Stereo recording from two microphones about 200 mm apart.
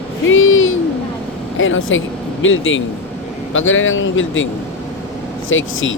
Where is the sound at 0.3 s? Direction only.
80° left.